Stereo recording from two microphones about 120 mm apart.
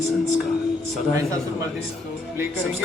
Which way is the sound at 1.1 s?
25° right (ahead or behind).